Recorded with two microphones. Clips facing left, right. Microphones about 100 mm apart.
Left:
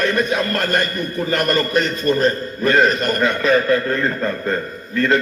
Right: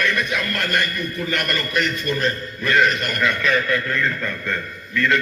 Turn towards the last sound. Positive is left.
turn(degrees=35)  # may be behind; listen again after turning